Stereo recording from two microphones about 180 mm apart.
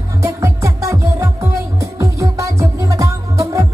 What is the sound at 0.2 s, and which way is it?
Music, 15° right (ahead or behind).